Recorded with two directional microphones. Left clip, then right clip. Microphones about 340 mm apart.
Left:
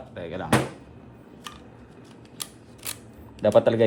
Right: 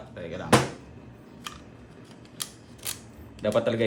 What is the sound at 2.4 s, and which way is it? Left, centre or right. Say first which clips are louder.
Scissors: right 1 dB; centre.